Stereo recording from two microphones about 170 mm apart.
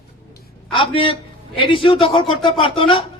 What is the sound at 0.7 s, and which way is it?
A man's voice, 30° left (ahead or behind).